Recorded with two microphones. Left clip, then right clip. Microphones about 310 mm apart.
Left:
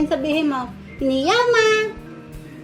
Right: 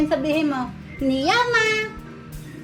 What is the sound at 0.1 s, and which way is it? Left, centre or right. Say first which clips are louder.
Speech: left 1 dB; centre.